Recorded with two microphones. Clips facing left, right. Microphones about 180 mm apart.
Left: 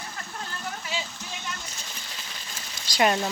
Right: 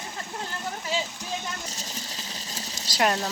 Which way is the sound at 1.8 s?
40° right (ahead or behind).